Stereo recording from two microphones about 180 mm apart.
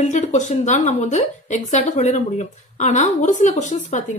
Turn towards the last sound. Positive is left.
turn(degrees=45)  # may be behind; listen again after turning